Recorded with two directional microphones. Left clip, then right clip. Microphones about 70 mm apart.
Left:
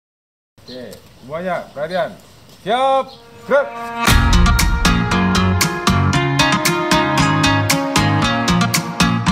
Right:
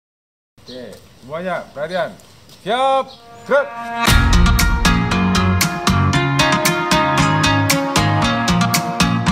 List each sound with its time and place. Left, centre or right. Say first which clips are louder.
1.3 s speech: left 1 dB; centre
4.0 s music: even; centre